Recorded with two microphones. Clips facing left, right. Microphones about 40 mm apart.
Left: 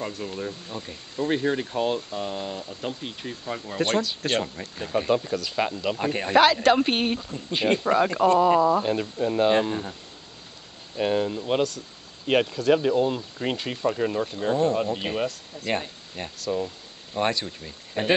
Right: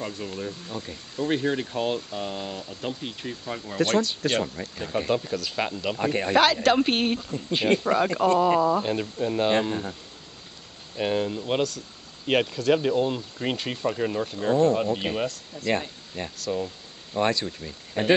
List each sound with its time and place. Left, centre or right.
0.0 s speech: centre
4.2 s speech: left
4.8 s speech: centre
11.0 s speech: centre